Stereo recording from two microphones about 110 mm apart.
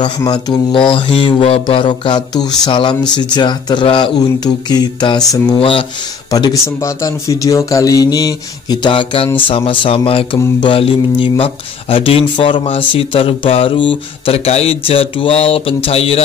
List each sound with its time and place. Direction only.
0.0 s speech: 40° left (ahead or behind)
4.5 s speech: 40° left (ahead or behind)
5.6 s speech: 55° left (ahead or behind)
6.3 s speech: 30° left (ahead or behind); by 16.2 s 65° left (ahead or behind)